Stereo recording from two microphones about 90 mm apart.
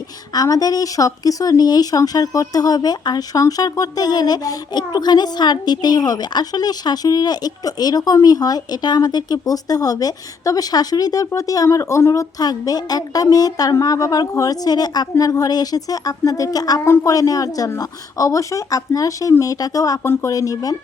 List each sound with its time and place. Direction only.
0.3 s speech: 45° left (ahead or behind)
16.8 s speech: 30° left (ahead or behind)